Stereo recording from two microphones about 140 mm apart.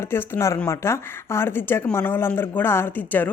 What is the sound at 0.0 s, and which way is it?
Speech, 15° left (ahead or behind).